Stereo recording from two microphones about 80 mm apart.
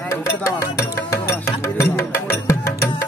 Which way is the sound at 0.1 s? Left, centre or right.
Left.